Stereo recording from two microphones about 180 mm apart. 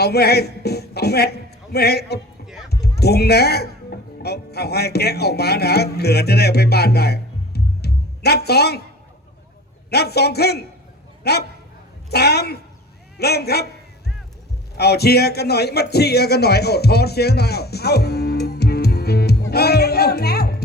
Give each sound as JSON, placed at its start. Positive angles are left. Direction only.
{"t": 0.0, "sound": "a man's voice", "side_deg": 65}
{"t": 9.9, "sound": "a man's voice", "side_deg": 65}
{"t": 14.8, "sound": "a sound", "side_deg": 65}